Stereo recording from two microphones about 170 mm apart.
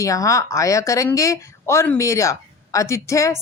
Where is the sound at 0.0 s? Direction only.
20° left (ahead or behind).